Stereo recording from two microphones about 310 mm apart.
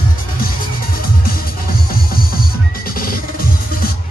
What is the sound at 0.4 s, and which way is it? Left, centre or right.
Music, left.